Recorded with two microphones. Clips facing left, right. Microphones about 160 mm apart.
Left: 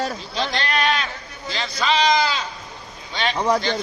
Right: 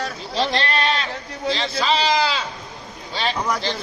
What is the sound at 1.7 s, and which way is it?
Speech, 35° right (ahead or behind).